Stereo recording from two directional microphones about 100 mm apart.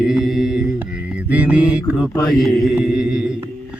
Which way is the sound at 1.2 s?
15° right (ahead or behind).